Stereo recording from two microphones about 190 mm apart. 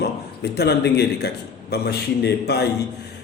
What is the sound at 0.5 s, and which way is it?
A man's voice, 60° left (ahead or behind).